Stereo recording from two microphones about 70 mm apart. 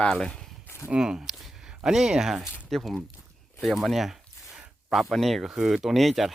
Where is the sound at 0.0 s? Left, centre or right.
Centre.